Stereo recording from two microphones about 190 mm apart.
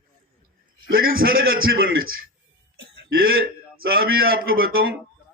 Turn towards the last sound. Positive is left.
turn(degrees=-55)  # may be behind; listen again after turning